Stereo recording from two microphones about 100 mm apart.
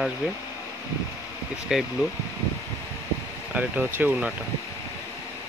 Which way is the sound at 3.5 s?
20° right (ahead or behind).